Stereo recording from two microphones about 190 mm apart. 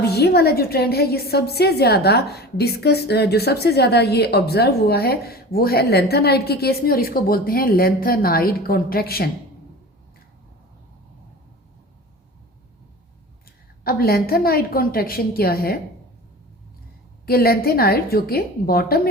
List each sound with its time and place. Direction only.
0.0 s a woman's voice: 60° left (ahead or behind)
13.8 s a woman's voice: 50° left (ahead or behind)
17.2 s a woman's voice: 55° left (ahead or behind)